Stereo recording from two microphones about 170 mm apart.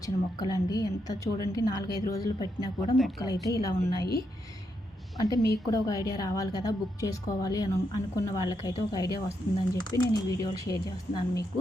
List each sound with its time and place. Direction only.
0.0 s a woman's voice: 20° left (ahead or behind)
5.3 s a woman's voice: 20° left (ahead or behind)